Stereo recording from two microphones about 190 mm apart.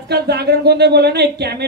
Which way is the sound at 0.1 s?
60° right (ahead or behind).